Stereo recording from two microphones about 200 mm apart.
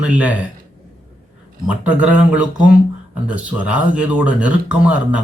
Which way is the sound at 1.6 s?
5° right (ahead or behind).